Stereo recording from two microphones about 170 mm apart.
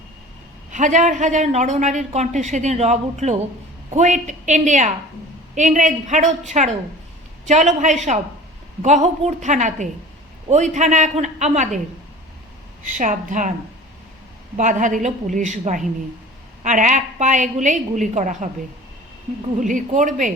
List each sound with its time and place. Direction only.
0.7 s a woman's voice: 45° right (ahead or behind)
12.8 s a woman's voice: 45° right (ahead or behind)
14.5 s a woman's voice: 45° right (ahead or behind)
19.5 s a woman's voice: 50° right (ahead or behind)